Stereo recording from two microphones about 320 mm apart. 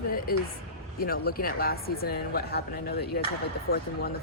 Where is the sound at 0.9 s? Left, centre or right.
Left.